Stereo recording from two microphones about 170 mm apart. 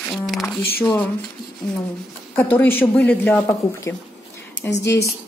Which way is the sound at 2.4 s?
10° left (ahead or behind).